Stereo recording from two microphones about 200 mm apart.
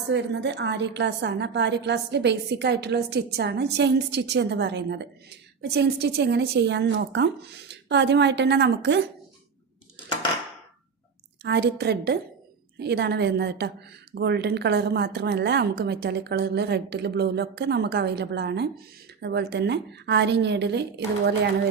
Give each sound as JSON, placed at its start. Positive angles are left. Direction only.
{"t": 0.1, "sound": "a woman's voice", "side_deg": -60}
{"t": 11.4, "sound": "a woman's voice", "side_deg": -60}